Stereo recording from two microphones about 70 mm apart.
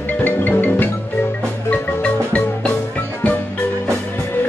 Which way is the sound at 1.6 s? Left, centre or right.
Left.